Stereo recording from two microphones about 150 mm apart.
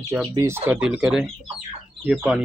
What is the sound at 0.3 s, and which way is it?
Speech, 20° right (ahead or behind).